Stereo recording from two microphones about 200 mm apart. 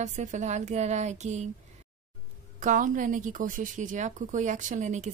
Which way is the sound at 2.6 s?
40° right (ahead or behind).